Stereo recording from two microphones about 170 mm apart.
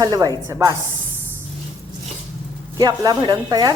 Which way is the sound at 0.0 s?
20° right (ahead or behind).